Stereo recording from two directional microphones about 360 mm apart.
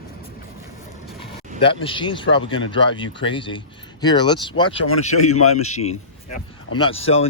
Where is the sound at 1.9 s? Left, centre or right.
Centre.